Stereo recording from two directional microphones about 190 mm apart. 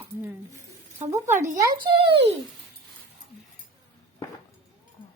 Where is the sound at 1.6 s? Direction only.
25° right (ahead or behind).